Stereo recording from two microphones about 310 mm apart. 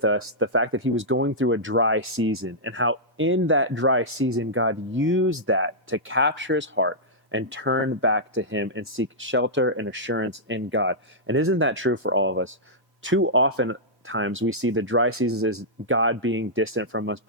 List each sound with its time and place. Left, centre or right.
0.0 s speech: right